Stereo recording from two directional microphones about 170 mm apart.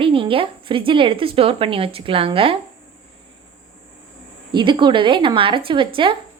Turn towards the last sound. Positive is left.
turn(degrees=-30)  # may be behind; listen again after turning